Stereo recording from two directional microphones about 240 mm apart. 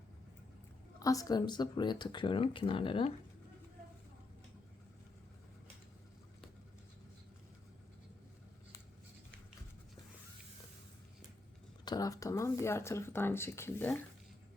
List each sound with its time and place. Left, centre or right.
0.9 s speech: centre
11.9 s speech: centre